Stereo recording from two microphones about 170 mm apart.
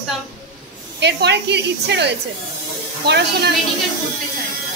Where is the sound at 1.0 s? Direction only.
85° right.